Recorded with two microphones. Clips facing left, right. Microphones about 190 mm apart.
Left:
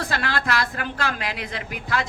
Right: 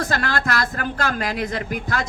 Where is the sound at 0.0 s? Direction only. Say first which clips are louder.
Right 3 dB; 45° right (ahead or behind).